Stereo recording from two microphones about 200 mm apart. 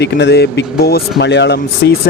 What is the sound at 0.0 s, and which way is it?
Speech, 55° left (ahead or behind).